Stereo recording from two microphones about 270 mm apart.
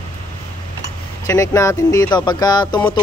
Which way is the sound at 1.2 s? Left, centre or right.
Centre.